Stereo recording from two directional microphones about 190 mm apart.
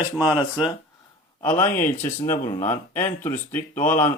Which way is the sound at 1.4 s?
10° left (ahead or behind).